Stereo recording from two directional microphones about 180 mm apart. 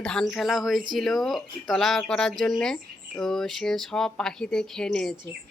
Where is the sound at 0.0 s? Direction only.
5° left (ahead or behind).